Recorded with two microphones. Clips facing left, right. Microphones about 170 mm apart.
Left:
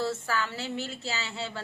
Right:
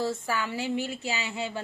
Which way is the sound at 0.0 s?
15° right (ahead or behind).